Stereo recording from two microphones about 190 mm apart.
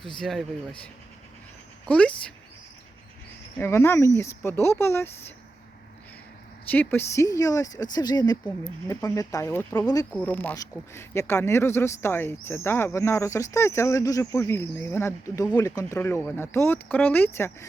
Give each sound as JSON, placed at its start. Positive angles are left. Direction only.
{"t": 0.2, "sound": "speech", "side_deg": 0}
{"t": 1.9, "sound": "speech", "side_deg": 5}
{"t": 3.6, "sound": "speech", "side_deg": 15}
{"t": 6.7, "sound": "speech", "side_deg": 10}